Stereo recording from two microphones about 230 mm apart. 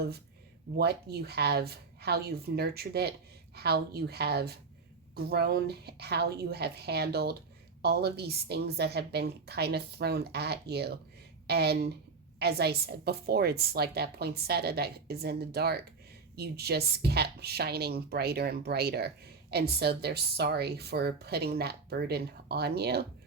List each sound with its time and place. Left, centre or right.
0.8 s a woman's voice: right